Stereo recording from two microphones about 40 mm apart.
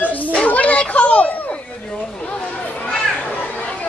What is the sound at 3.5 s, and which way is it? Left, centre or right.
Chatter, left.